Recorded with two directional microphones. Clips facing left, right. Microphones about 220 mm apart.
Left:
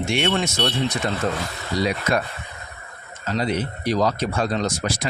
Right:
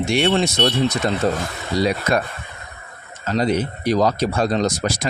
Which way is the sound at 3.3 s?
40° right (ahead or behind).